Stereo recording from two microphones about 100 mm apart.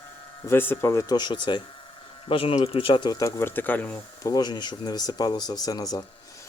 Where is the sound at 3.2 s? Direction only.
30° left (ahead or behind).